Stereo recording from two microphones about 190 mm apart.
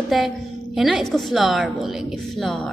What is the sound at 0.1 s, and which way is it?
A woman's voice, centre (ahead or behind).